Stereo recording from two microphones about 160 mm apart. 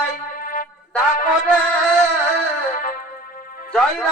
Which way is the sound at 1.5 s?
5° left (ahead or behind).